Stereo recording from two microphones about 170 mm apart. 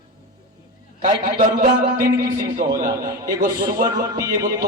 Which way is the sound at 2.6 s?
20° right (ahead or behind).